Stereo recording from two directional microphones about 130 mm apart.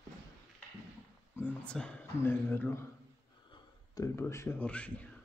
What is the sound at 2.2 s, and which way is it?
Speech, 20° left (ahead or behind).